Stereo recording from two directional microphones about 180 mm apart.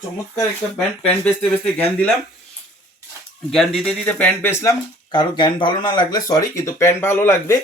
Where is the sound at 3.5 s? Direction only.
Centre (ahead or behind).